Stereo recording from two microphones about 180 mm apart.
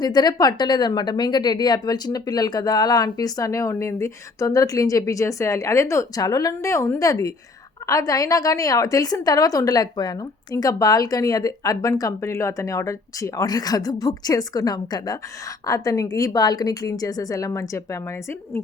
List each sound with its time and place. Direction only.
0.0 s speech: 25° left (ahead or behind)